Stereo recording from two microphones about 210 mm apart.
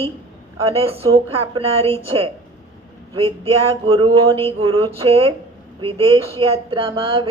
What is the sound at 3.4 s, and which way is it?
Speech, 25° right (ahead or behind).